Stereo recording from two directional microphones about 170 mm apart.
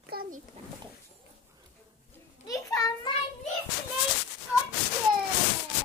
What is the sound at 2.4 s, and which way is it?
Speech, 20° left (ahead or behind).